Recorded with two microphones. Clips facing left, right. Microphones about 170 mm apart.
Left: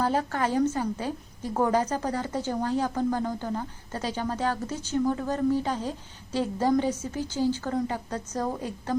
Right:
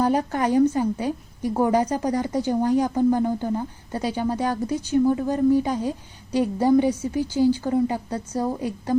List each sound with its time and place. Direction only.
0.0 s a woman's voice: 15° right (ahead or behind)